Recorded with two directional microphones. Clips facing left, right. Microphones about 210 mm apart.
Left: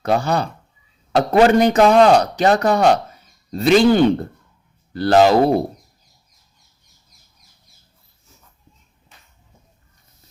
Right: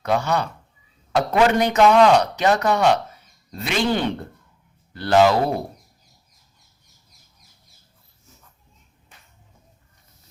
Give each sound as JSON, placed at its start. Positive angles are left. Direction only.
{"t": 0.0, "sound": "speech", "side_deg": 35}